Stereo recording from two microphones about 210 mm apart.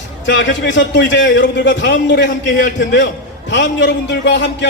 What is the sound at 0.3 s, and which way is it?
A man's voice, 60° left (ahead or behind).